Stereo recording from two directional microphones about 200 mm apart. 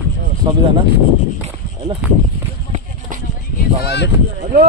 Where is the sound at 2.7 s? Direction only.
40° right (ahead or behind).